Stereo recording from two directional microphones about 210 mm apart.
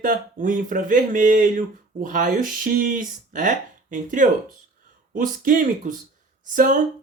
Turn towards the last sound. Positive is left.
turn(degrees=-40)  # may be behind; listen again after turning